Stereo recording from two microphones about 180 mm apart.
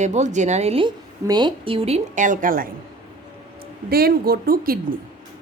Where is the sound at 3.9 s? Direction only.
55° right (ahead or behind).